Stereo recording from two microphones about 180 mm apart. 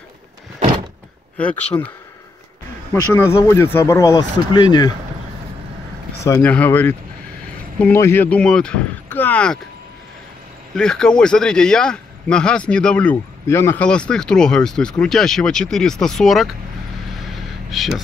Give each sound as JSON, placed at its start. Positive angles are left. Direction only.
{"t": 1.7, "sound": "speech", "side_deg": 15}
{"t": 6.2, "sound": "speech", "side_deg": 15}
{"t": 10.7, "sound": "a man's voice", "side_deg": 5}
{"t": 17.6, "sound": "speech", "side_deg": 0}